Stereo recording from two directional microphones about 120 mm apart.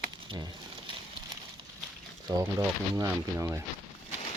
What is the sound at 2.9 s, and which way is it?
Speech, 20° right (ahead or behind).